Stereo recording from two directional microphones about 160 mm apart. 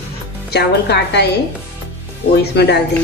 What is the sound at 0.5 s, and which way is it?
Speech, 90° left.